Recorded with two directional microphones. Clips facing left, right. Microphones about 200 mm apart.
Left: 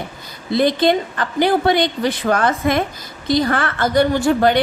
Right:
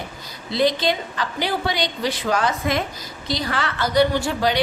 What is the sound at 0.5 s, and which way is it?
A woman's voice, 55° left (ahead or behind).